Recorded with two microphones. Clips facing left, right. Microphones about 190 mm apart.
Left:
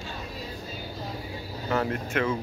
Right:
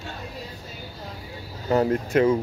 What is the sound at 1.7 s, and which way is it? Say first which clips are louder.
Speech: right 7 dB; 35° right (ahead or behind).